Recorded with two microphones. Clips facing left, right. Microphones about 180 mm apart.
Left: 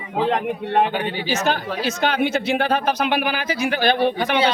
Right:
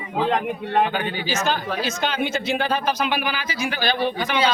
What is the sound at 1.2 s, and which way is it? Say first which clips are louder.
Speech: left 3 dB; 65° left (ahead or behind).